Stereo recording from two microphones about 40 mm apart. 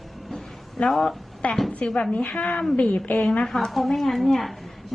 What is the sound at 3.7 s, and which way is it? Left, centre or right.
Speech, centre.